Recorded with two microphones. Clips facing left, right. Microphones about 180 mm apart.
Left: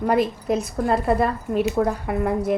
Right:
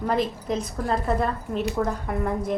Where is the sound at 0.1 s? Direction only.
10° left (ahead or behind).